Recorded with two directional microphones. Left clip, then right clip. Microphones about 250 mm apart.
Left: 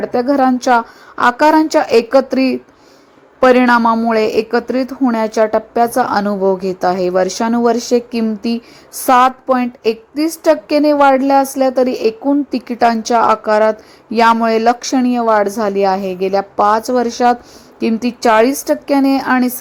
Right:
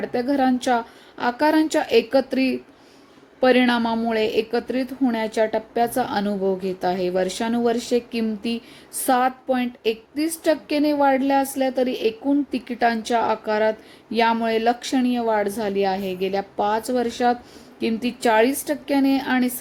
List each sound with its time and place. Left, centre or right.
0.0 s a woman's voice: centre
16.6 s speech: centre
16.9 s a woman's voice: centre